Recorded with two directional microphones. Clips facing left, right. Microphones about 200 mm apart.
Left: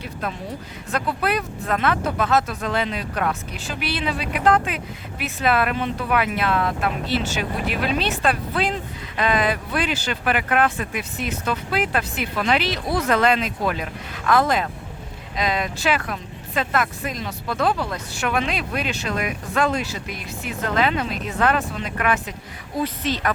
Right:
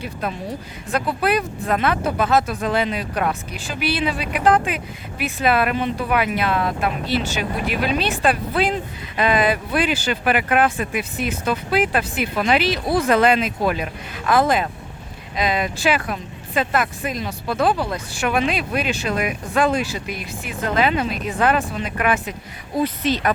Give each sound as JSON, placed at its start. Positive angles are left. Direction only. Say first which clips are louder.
{"t": 0.0, "sound": "speech", "louder": "right 3 dB", "side_deg": -10}